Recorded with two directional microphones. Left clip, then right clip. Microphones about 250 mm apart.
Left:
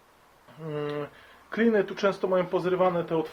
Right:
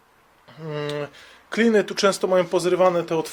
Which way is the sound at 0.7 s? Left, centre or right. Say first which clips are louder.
Right 4 dB; right.